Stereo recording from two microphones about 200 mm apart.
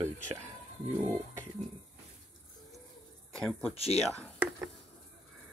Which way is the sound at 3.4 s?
5° left (ahead or behind).